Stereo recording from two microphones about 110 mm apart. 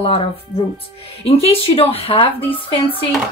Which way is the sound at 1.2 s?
65° left (ahead or behind).